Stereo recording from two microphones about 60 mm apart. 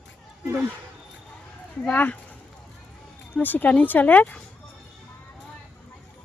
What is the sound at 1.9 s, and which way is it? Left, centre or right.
Speech, left.